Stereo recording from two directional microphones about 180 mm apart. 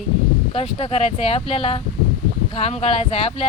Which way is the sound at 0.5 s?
35° left (ahead or behind).